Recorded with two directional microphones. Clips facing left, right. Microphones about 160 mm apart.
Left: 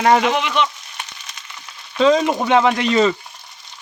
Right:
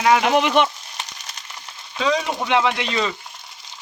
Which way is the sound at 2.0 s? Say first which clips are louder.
Left 7 dB; 45° left (ahead or behind).